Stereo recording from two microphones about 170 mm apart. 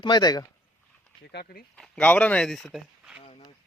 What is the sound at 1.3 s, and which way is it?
Speech, 70° left (ahead or behind).